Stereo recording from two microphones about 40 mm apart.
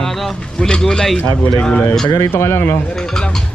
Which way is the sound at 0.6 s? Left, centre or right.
Centre.